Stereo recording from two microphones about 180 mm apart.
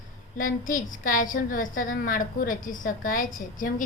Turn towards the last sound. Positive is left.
turn(degrees=50)  # may be behind; listen again after turning